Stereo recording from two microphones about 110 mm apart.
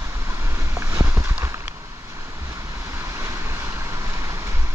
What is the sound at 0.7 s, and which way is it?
Boat, 25° right (ahead or behind).